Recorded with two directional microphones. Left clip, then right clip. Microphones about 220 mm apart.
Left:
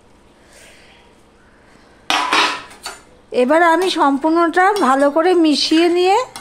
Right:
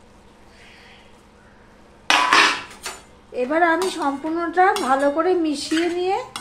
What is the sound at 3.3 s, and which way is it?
Speech, 55° left (ahead or behind).